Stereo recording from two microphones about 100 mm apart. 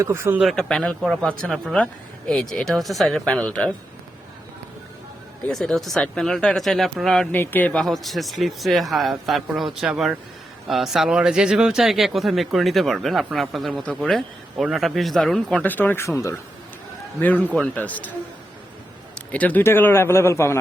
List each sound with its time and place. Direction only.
0.0 s speech: 25° right (ahead or behind)
0.4 s speech: 5° left (ahead or behind)
1.7 s speech: 10° left (ahead or behind)
5.5 s speech: 5° left (ahead or behind)
7.3 s speech: 20° left (ahead or behind)
15.6 s speech: 20° left (ahead or behind)
16.0 s speech: 30° left (ahead or behind)
17.2 s speech: 15° left (ahead or behind)
19.3 s speech: 15° left (ahead or behind)